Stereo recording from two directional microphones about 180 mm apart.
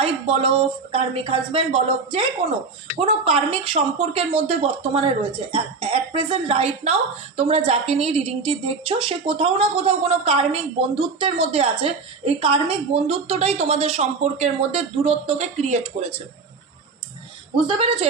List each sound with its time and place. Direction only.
0.0 s a woman's voice: 30° right (ahead or behind)
17.7 s speech: 30° right (ahead or behind)